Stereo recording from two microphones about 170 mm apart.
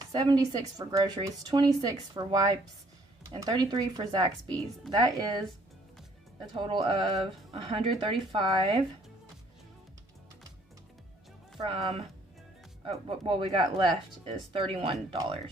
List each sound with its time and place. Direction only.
0.1 s speech: 25° right (ahead or behind)
6.5 s speech: 30° right (ahead or behind)
11.7 s speech: 35° right (ahead or behind)